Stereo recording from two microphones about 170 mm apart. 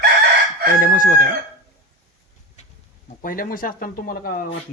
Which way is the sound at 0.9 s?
50° left (ahead or behind).